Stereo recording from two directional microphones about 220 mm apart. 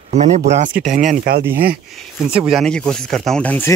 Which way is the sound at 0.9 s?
35° right (ahead or behind).